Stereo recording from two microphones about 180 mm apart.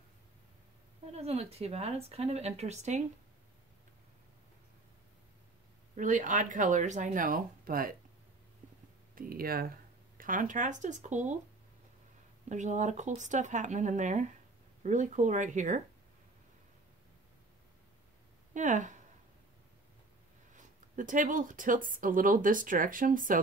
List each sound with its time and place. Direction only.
1.1 s speech: 35° right (ahead or behind)
5.9 s speech: 45° right (ahead or behind)
9.1 s speech: 55° right (ahead or behind)
12.4 s speech: 40° right (ahead or behind)
18.5 s speech: 45° right (ahead or behind)
20.5 s speech: 45° right (ahead or behind)